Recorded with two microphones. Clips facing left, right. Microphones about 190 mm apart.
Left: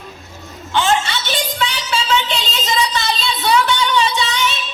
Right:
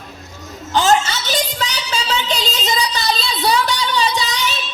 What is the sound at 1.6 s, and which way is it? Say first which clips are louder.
Music: left 2 dB; 35° right (ahead or behind).